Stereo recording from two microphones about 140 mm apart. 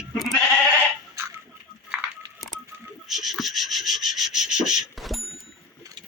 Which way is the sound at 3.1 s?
Centre (ahead or behind).